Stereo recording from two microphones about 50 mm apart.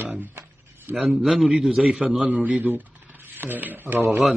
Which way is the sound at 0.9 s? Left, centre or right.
Right.